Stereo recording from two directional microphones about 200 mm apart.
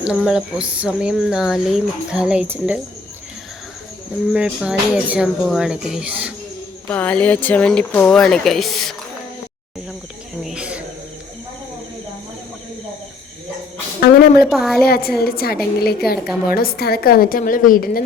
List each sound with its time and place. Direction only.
0.0 s speech: 5° right (ahead or behind)
4.3 s speech: 5° right (ahead or behind)
6.8 s speech: 10° left (ahead or behind)
10.4 s cricket: 5° right (ahead or behind)
14.5 s speech: centre (ahead or behind)
14.8 s a woman's voice: 50° left (ahead or behind)
16.2 s speech: 5° right (ahead or behind)
16.6 s a woman's voice: 50° left (ahead or behind)